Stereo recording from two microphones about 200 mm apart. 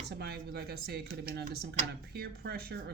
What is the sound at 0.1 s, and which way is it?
Speech, 55° right (ahead or behind).